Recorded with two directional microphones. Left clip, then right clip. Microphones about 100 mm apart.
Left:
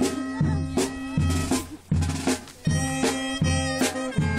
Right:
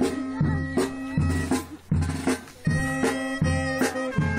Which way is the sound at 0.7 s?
10° left (ahead or behind).